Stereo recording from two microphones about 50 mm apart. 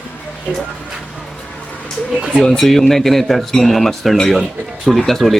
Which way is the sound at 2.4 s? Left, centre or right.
Centre.